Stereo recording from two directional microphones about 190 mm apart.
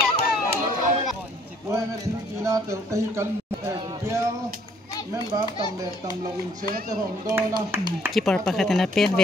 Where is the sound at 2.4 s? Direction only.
15° right (ahead or behind).